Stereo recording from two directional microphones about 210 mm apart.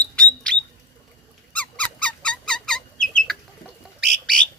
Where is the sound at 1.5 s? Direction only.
5° left (ahead or behind).